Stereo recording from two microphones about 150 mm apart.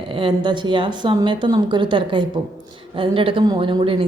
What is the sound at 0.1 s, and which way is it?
A woman's voice, 35° right (ahead or behind).